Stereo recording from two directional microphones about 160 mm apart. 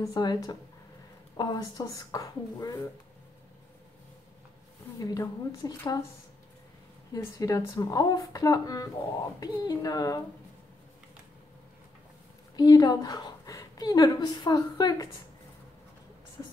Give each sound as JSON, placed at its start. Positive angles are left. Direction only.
{"t": 0.0, "sound": "speech", "side_deg": 25}
{"t": 4.9, "sound": "speech", "side_deg": 20}
{"t": 7.2, "sound": "speech", "side_deg": 20}
{"t": 12.5, "sound": "a woman's voice", "side_deg": 25}
{"t": 16.4, "sound": "speech", "side_deg": 15}